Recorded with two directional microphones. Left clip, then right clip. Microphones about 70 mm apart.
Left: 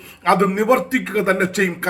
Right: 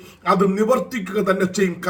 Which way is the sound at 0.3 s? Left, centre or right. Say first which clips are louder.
Left 2 dB; right.